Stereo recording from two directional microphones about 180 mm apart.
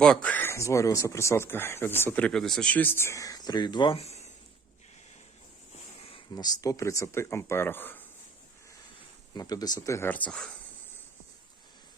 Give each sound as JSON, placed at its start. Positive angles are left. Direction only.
{"t": 0.0, "sound": "speech", "side_deg": 5}
{"t": 5.7, "sound": "a sound", "side_deg": 30}
{"t": 6.3, "sound": "speech", "side_deg": 20}
{"t": 9.3, "sound": "speech", "side_deg": 20}